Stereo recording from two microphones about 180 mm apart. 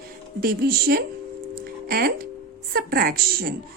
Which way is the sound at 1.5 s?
60° right (ahead or behind).